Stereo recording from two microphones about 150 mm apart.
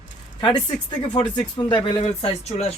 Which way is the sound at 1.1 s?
30° left (ahead or behind).